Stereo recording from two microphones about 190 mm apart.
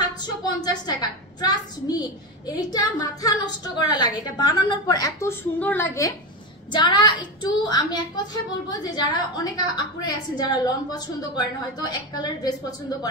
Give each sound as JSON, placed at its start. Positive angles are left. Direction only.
{"t": 0.2, "sound": "a woman's voice", "side_deg": 20}